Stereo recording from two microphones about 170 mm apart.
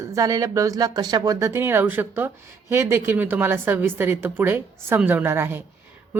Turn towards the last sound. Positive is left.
turn(degrees=-15)  # may be behind; listen again after turning